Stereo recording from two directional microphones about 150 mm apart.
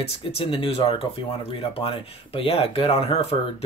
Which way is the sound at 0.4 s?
35° left (ahead or behind).